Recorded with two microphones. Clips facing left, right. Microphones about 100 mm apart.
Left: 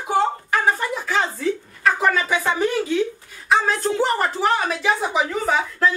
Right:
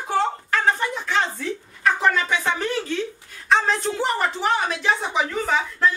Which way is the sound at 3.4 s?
5° left (ahead or behind).